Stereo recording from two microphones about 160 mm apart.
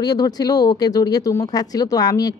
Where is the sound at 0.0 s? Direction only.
25° left (ahead or behind).